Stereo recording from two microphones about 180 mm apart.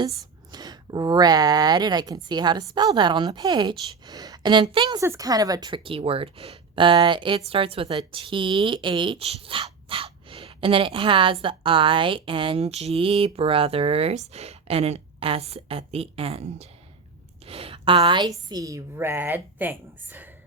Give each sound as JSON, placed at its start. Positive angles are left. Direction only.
{"t": 0.5, "sound": "a woman's voice", "side_deg": -20}
{"t": 4.9, "sound": "speech", "side_deg": -15}
{"t": 17.4, "sound": "a sound", "side_deg": -30}
{"t": 18.4, "sound": "a woman's voice", "side_deg": -20}